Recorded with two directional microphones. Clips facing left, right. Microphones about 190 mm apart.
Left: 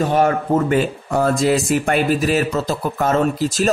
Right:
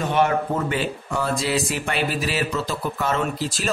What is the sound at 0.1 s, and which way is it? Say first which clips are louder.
A man's voice: left 4 dB; 40° left (ahead or behind).